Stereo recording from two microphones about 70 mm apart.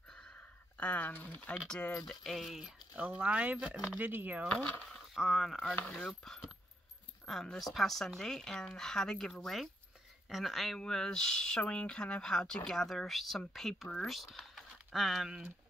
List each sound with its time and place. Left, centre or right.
0.7 s speech: centre
2.0 s a woman's voice: centre
3.0 s speech: centre
4.5 s speech: centre
4.9 s speech: centre
6.0 s mechanisms: centre
7.2 s a woman's voice: centre